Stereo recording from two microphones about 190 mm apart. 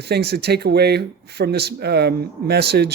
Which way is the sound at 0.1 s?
60° right (ahead or behind).